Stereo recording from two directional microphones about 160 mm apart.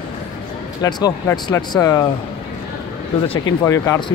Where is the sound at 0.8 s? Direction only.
25° left (ahead or behind).